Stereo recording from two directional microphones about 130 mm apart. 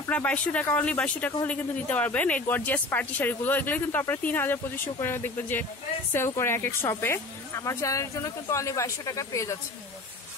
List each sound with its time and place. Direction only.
0.1 s speech: 10° left (ahead or behind)